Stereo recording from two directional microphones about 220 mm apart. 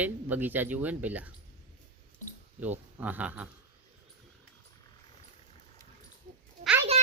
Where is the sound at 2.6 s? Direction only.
5° right (ahead or behind).